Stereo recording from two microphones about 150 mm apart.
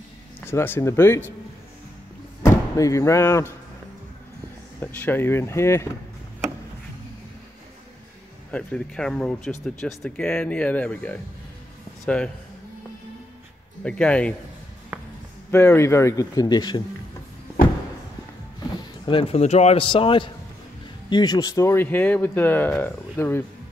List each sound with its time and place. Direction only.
0.5 s speech: 15° left (ahead or behind)
2.4 s speech: 20° left (ahead or behind)
4.7 s speech: 15° left (ahead or behind)
8.5 s speech: 5° left (ahead or behind)
13.8 s speech: 5° left (ahead or behind)
14.9 s a sound: 5° right (ahead or behind)
15.5 s speech: 15° left (ahead or behind)
19.0 s a man's voice: 40° left (ahead or behind); by 23.4 s 15° left (ahead or behind)